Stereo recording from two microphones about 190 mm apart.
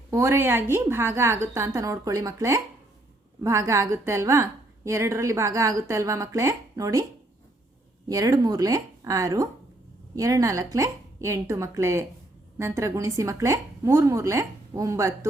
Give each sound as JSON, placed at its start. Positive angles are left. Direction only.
{"t": 0.1, "sound": "a woman's voice", "side_deg": -15}
{"t": 8.0, "sound": "a woman's voice", "side_deg": -20}